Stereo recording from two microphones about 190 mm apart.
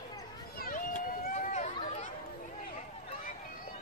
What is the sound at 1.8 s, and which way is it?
Chatter, 35° left (ahead or behind).